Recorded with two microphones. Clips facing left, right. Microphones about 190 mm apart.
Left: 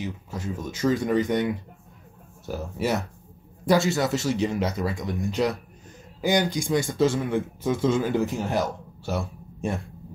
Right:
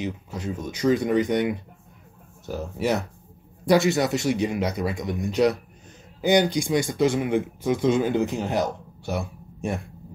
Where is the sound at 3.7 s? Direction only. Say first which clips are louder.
Right 2 dB; 15° right (ahead or behind).